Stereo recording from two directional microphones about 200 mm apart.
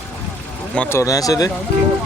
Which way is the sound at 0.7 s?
10° left (ahead or behind).